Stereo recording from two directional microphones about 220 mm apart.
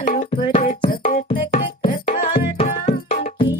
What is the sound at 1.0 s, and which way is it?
Music, 30° left (ahead or behind).